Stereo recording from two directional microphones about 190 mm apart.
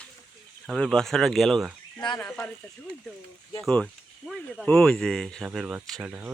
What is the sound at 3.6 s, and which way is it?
Speech, 5° left (ahead or behind).